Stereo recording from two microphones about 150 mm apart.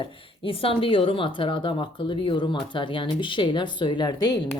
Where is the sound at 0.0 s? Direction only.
35° left (ahead or behind).